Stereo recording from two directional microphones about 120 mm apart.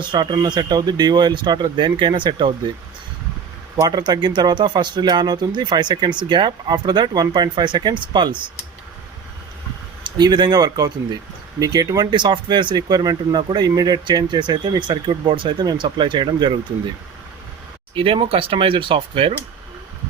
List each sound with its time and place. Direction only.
0.0 s speech: 40° right (ahead or behind)
3.8 s speech: 35° right (ahead or behind)
10.0 s speech: 35° right (ahead or behind)
17.9 s speech: 50° right (ahead or behind)